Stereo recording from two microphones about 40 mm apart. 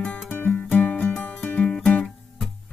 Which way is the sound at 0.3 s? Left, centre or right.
Left.